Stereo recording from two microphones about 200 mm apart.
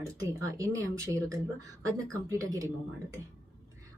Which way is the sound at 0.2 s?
15° right (ahead or behind).